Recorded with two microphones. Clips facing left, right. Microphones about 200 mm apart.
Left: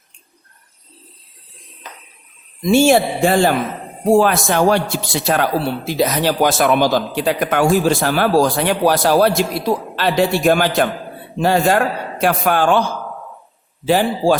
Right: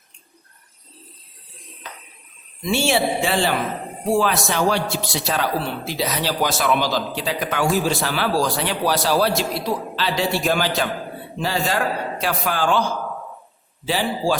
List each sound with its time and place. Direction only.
2.7 s a man's voice: 50° left (ahead or behind)
13.8 s a man's voice: 50° left (ahead or behind)